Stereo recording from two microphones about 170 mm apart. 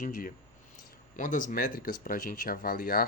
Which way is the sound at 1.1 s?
50° left (ahead or behind).